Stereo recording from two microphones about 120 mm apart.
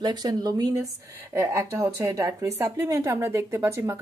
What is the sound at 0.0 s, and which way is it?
Speech, 35° right (ahead or behind).